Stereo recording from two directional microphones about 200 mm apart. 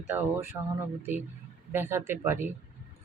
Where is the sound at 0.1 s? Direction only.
10° right (ahead or behind).